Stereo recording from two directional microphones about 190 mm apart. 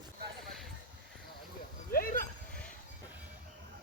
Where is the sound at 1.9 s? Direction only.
50° left (ahead or behind).